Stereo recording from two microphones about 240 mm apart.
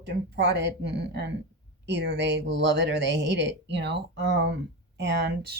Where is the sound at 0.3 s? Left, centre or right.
Right.